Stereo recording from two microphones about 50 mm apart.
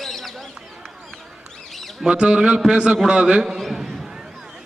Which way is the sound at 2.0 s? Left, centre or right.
Centre.